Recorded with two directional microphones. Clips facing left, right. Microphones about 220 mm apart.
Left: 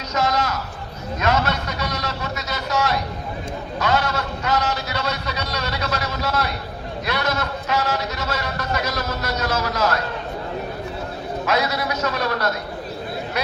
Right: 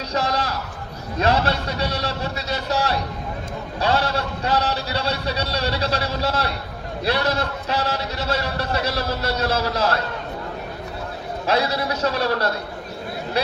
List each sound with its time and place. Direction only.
0.1 s a sound: 30° right (ahead or behind)
1.2 s a man's voice: 30° right (ahead or behind)
11.4 s a man's voice: 30° right (ahead or behind)